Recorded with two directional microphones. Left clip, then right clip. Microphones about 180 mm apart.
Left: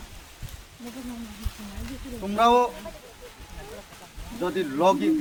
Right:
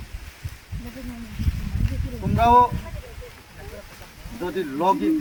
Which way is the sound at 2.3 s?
15° left (ahead or behind).